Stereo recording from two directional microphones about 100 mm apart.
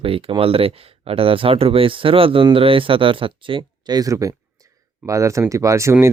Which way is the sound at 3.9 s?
35° right (ahead or behind).